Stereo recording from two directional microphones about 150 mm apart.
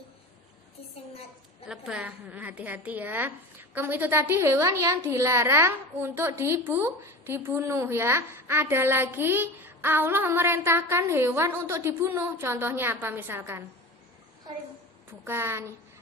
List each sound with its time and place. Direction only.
1.6 s a woman's voice: 5° right (ahead or behind)
15.2 s a woman's voice: 15° right (ahead or behind)